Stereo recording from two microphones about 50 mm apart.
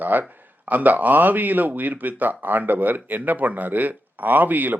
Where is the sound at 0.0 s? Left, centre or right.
Right.